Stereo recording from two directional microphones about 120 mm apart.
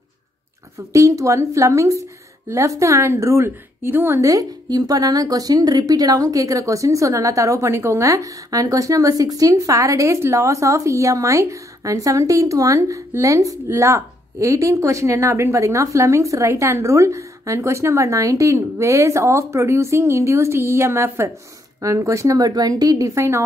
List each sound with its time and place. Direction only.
0.7 s a woman's voice: 25° right (ahead or behind)